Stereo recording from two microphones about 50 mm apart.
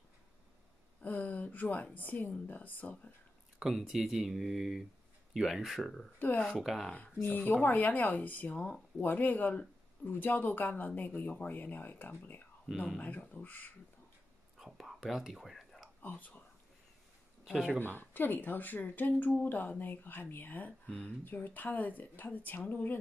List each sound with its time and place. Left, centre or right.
1.0 s speech: left
3.5 s speech: centre
7.2 s speech: left
10.7 s speech: left
14.6 s whispering: centre
16.0 s speech: left
17.5 s speech: centre
17.7 s speech: left
20.8 s speech: left
21.2 s speech: left